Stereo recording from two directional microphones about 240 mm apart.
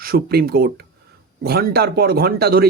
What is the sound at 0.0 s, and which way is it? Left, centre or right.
Speech, right.